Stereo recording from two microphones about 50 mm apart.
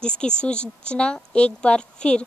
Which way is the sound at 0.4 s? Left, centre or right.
Left.